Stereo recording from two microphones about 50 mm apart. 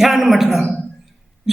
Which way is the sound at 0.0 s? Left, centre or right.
Centre.